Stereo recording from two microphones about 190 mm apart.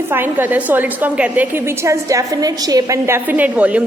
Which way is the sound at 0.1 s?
10° right (ahead or behind).